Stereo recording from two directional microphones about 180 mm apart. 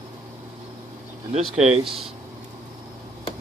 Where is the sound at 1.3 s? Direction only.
35° right (ahead or behind).